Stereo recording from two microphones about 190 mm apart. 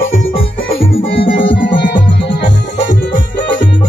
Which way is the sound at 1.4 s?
70° left (ahead or behind).